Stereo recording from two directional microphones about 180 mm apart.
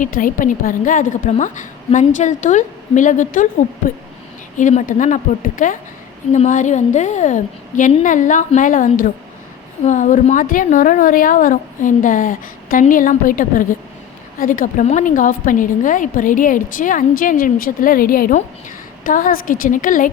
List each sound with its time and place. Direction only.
0.0 s a woman's voice: 50° left (ahead or behind)